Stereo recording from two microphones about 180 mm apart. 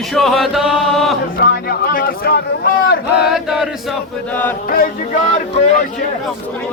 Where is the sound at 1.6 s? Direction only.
55° left (ahead or behind).